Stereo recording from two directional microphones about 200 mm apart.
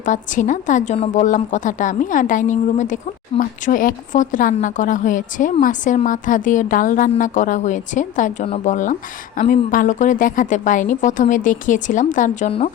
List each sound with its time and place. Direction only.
0.0 s a woman's voice: 40° left (ahead or behind)